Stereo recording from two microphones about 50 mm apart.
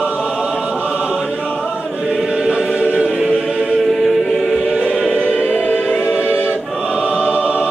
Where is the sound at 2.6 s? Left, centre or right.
Right.